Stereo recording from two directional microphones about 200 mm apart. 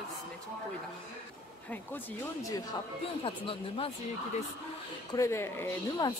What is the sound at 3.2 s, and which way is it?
Speech, 30° left (ahead or behind).